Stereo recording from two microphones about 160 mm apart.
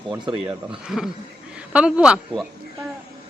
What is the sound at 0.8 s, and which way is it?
A woman's voice, 5° right (ahead or behind).